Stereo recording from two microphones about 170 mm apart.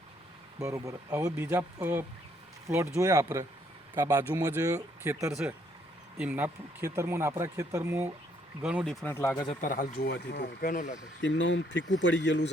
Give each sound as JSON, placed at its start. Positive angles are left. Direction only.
{"t": 0.6, "sound": "speech", "side_deg": -15}
{"t": 5.3, "sound": "speech", "side_deg": -5}
{"t": 8.6, "sound": "speech", "side_deg": 0}
{"t": 9.0, "sound": "speech", "side_deg": 10}
{"t": 9.6, "sound": "speech", "side_deg": 55}
{"t": 11.2, "sound": "speech", "side_deg": 90}